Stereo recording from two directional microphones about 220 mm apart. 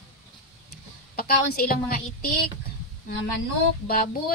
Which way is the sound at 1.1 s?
45° left (ahead or behind).